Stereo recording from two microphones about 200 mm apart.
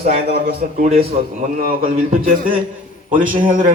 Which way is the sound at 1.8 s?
45° right (ahead or behind).